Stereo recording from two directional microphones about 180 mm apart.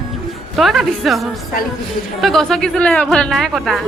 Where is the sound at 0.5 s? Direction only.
Centre (ahead or behind).